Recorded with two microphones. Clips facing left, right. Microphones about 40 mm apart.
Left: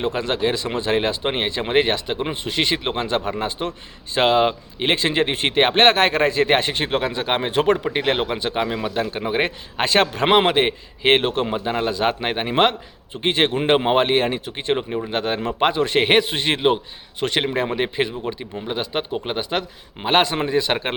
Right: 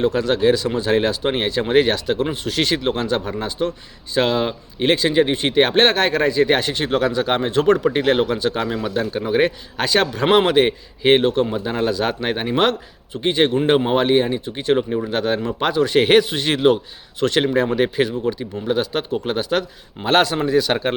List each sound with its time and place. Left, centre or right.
0.0 s a man's voice: left
3.2 s a man's voice: left
9.9 s speech: left
10.3 s a man's voice: left
11.6 s a man's voice: centre
13.2 s speech: left
14.5 s a man's voice: left
15.5 s a man's voice: left